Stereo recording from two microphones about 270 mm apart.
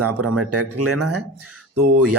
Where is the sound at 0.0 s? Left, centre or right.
Right.